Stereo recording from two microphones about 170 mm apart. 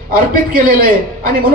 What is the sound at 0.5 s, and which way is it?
Speech, 55° right (ahead or behind).